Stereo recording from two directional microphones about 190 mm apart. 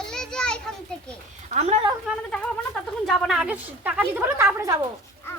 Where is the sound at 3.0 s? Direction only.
Centre (ahead or behind); by 4.8 s 15° right (ahead or behind).